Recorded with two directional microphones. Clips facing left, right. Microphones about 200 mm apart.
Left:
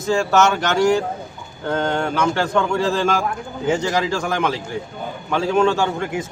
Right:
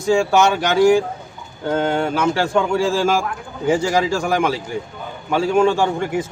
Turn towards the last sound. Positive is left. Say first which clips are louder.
# right 2 dB
turn(degrees=-10)  # may be behind; listen again after turning